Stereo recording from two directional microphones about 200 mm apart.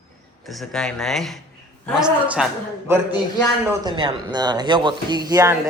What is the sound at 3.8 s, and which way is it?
Speech, 25° right (ahead or behind).